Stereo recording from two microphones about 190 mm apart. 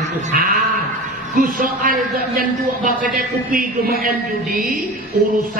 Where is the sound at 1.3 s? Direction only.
45° right (ahead or behind).